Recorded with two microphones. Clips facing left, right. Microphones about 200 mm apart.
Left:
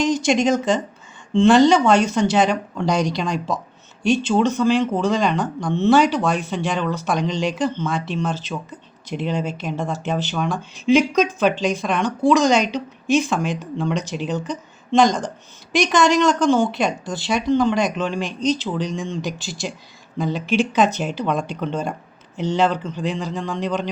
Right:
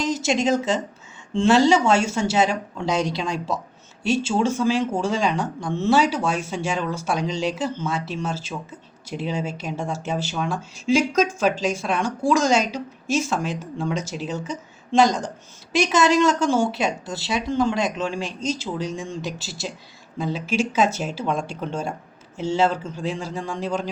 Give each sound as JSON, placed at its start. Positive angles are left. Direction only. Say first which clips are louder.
{"t": 0.0, "sound": "a woman's voice", "louder": "left 4 dB", "side_deg": -5}